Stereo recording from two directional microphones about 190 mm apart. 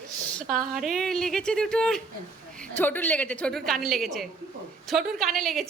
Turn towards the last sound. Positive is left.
turn(degrees=0)  # may be behind; listen again after turning